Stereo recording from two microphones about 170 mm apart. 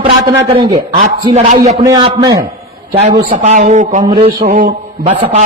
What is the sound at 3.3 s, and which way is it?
Speech, 45° right (ahead or behind).